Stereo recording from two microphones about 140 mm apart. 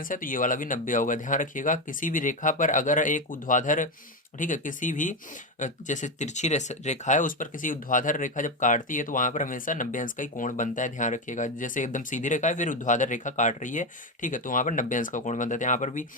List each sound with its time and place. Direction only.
0.0 s speech: 80° left